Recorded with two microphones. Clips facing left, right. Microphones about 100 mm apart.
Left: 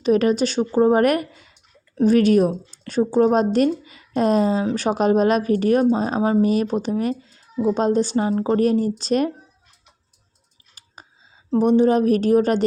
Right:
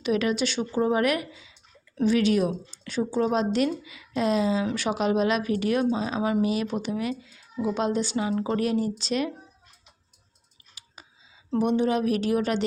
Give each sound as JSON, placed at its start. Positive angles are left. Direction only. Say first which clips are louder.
{"t": 0.0, "sound": "a woman's voice", "louder": "left 7 dB", "side_deg": 40}
{"t": 11.0, "sound": "a sound", "louder": "left 5 dB", "side_deg": 40}
{"t": 11.5, "sound": "speech", "louder": "left 7 dB", "side_deg": 35}